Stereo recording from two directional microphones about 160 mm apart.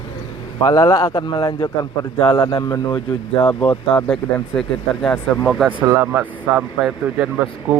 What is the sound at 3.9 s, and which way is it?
Speech, 5° left (ahead or behind).